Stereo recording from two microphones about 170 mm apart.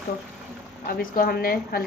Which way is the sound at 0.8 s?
60° left (ahead or behind).